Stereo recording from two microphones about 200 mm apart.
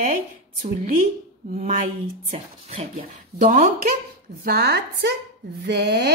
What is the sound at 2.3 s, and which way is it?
Speech, 30° right (ahead or behind).